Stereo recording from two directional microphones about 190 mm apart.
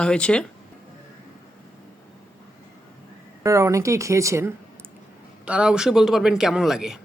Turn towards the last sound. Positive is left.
turn(degrees=0)  # may be behind; listen again after turning